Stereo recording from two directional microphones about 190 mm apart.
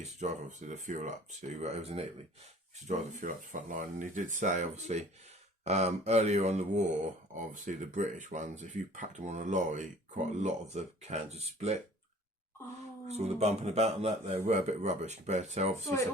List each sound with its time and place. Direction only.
0.0 s speech: 40° right (ahead or behind)
13.1 s speech: 35° right (ahead or behind)